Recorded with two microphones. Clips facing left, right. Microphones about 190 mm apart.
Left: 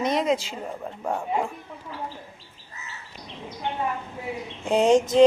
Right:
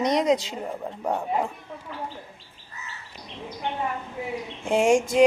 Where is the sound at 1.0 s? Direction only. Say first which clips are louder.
Even; centre (ahead or behind).